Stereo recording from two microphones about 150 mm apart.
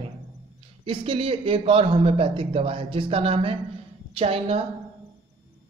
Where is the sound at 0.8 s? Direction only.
35° right (ahead or behind).